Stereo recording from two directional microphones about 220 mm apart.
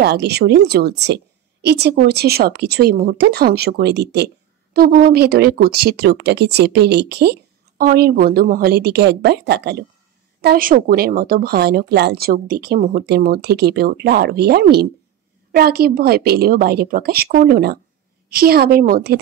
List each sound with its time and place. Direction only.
0.0 s speech: 50° right (ahead or behind)